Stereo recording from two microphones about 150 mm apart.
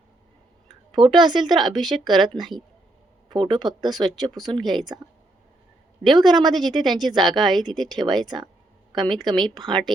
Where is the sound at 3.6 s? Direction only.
30° right (ahead or behind).